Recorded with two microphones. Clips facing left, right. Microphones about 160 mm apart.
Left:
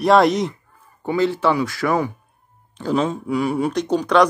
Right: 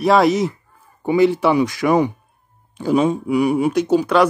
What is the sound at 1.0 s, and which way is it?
Speech, 15° right (ahead or behind).